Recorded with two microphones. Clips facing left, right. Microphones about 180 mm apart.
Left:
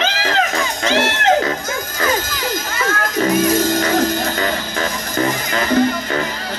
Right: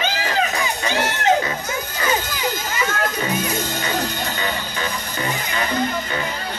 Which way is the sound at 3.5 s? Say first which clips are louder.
Left 8 dB; 90° left.